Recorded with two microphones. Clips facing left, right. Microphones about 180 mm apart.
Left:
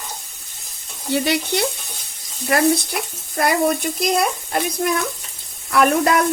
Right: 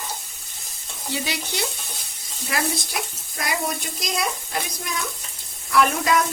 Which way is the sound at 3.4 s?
60° left (ahead or behind).